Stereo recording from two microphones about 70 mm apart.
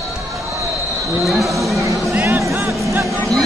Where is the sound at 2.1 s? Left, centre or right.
Right.